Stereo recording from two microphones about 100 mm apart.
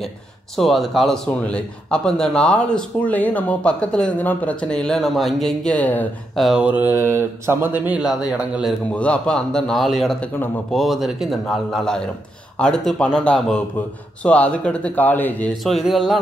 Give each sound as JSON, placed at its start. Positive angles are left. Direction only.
{"t": 0.6, "sound": "a man's voice", "side_deg": 0}
{"t": 6.3, "sound": "speech", "side_deg": 0}
{"t": 6.6, "sound": "mantra", "side_deg": -15}
{"t": 7.8, "sound": "a man's voice", "side_deg": -15}
{"t": 8.9, "sound": "a man's voice", "side_deg": 10}
{"t": 15.6, "sound": "speech", "side_deg": 0}